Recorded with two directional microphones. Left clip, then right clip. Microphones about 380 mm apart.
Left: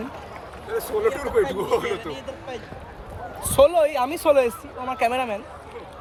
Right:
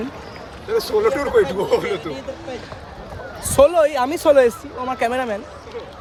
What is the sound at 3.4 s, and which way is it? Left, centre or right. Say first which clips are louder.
Speech: right 3 dB; centre.